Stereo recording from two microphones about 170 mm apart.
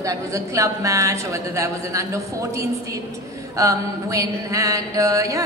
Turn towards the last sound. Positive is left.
turn(degrees=-20)  # may be behind; listen again after turning